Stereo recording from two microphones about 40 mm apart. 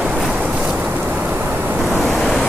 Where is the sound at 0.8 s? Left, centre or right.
Right.